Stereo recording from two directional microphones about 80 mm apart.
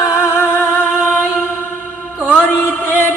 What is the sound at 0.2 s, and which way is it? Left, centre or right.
Music, left.